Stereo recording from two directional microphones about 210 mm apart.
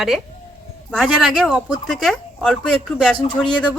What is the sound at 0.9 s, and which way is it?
Speech, centre (ahead or behind).